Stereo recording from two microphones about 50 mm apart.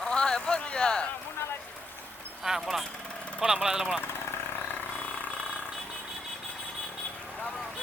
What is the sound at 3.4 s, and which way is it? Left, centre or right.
Speech, centre.